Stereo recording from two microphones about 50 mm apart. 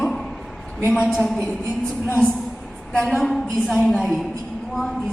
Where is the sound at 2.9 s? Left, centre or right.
Centre.